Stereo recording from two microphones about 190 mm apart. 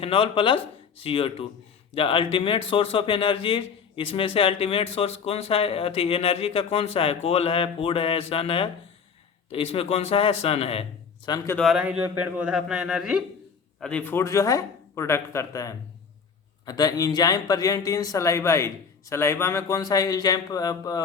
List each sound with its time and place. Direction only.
0.0 s a man's voice: 30° left (ahead or behind)
11.5 s a man's voice: centre (ahead or behind); by 21.0 s 20° left (ahead or behind)